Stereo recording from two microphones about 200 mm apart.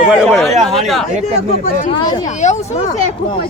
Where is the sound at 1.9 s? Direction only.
20° left (ahead or behind).